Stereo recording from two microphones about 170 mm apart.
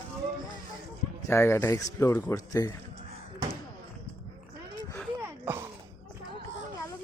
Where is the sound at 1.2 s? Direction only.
15° left (ahead or behind).